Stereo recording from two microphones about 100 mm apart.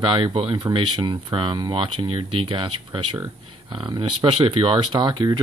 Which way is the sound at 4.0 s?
55° right (ahead or behind).